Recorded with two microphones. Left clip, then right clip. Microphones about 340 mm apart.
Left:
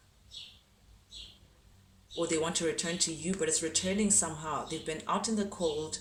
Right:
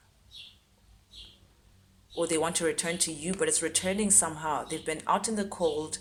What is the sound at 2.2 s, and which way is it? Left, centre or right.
Speech, right.